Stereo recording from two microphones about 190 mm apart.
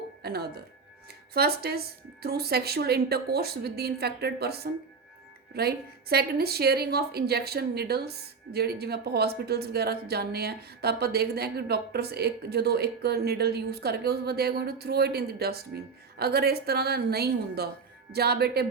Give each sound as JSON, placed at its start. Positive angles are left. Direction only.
{"t": 0.2, "sound": "a woman's voice", "side_deg": -55}